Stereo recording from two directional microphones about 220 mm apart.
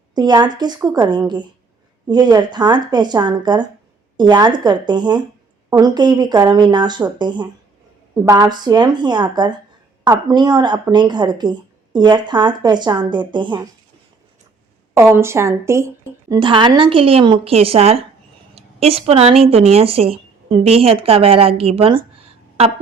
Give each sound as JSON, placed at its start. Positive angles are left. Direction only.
{"t": 0.1, "sound": "speech", "side_deg": -20}
{"t": 14.9, "sound": "a woman's voice", "side_deg": -10}